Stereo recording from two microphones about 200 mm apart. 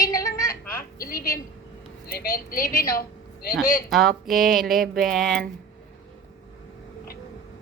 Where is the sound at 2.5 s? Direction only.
45° left (ahead or behind).